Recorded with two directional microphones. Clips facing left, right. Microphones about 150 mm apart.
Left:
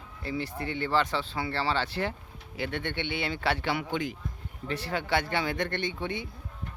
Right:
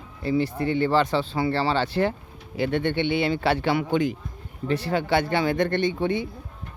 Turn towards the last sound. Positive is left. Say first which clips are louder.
# right 9 dB
turn(degrees=-35)  # may be behind; listen again after turning